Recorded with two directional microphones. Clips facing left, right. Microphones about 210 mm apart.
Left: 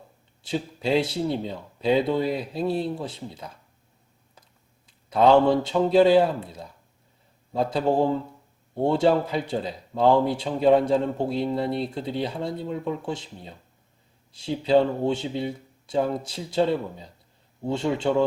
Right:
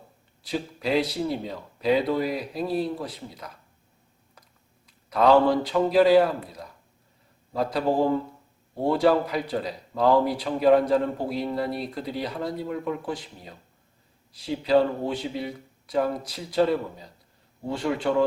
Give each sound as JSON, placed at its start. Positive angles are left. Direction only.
{"t": 0.4, "sound": "a man's voice", "side_deg": 25}
{"t": 4.9, "sound": "a man's voice", "side_deg": 25}